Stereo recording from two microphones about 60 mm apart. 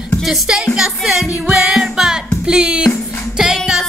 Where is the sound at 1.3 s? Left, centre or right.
Right.